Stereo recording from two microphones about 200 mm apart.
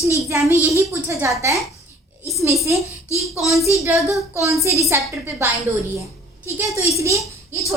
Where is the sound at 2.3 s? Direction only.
15° right (ahead or behind).